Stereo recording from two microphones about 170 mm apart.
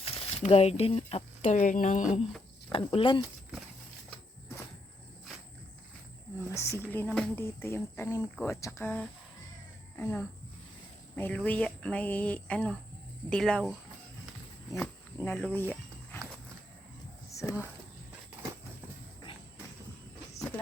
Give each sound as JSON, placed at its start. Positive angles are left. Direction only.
{"t": 0.0, "sound": "speech", "side_deg": 35}
{"t": 2.7, "sound": "speech", "side_deg": 30}
{"t": 6.4, "sound": "speech", "side_deg": 15}
{"t": 14.8, "sound": "speech", "side_deg": 5}
{"t": 17.4, "sound": "speech", "side_deg": 15}